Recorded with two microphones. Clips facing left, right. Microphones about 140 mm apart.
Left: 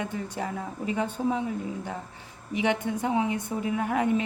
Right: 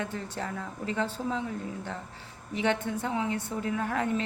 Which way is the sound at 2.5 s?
15° left (ahead or behind).